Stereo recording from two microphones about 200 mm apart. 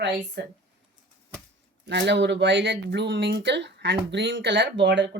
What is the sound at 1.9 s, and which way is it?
Speech, 60° right (ahead or behind).